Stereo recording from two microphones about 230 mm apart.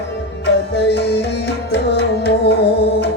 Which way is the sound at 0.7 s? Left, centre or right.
Left.